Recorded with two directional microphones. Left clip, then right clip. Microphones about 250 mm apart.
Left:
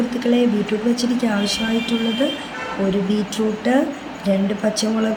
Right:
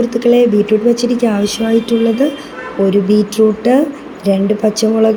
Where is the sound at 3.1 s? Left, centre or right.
Right.